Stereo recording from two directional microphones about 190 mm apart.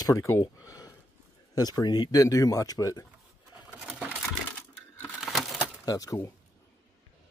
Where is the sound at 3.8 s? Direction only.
5° right (ahead or behind).